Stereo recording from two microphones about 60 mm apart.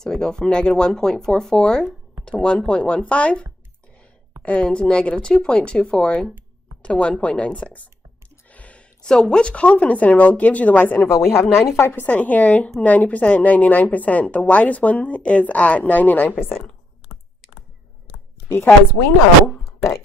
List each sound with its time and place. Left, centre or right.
0.0 s a woman's voice: centre
4.4 s a woman's voice: left
11.0 s a woman's voice: left
12.0 s a woman's voice: left
19.6 s a sound: left